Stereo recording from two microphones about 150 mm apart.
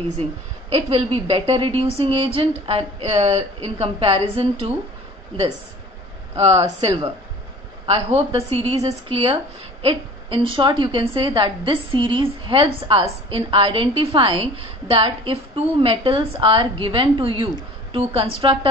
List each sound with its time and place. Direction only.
0.7 s a woman's voice: 40° right (ahead or behind)
6.3 s speech: 45° right (ahead or behind)
6.6 s speech: 25° right (ahead or behind)
7.8 s a woman's voice: 40° right (ahead or behind)